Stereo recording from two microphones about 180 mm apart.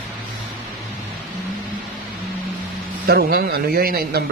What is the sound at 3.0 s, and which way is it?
Speech, 60° right (ahead or behind).